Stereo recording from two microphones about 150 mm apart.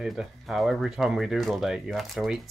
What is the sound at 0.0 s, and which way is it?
A woman's voice, 5° right (ahead or behind).